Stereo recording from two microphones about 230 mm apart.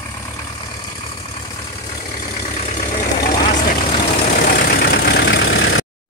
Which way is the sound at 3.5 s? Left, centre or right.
Left.